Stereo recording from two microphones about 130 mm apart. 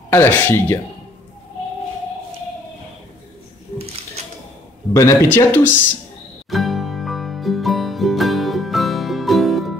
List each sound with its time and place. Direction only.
0.1 s speech: 15° left (ahead or behind)
4.9 s speech: 20° left (ahead or behind)
6.5 s music: centre (ahead or behind)